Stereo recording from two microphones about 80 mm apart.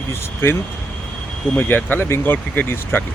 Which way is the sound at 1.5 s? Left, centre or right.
Left.